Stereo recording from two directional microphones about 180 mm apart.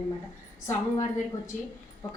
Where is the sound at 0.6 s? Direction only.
15° left (ahead or behind).